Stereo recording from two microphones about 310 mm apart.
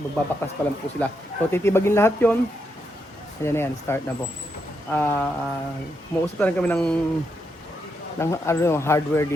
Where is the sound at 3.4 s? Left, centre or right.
Centre.